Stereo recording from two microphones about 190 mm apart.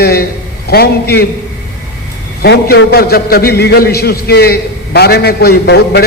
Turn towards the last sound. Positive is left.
turn(degrees=60)  # may be behind; listen again after turning